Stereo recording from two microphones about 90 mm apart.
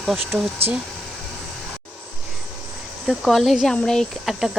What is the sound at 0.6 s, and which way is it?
Speech, 90° right.